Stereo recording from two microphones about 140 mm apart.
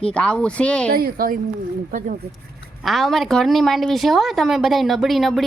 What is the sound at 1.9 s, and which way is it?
Speech, 65° right (ahead or behind).